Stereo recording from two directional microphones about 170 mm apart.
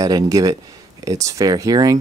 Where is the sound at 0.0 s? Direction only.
20° right (ahead or behind).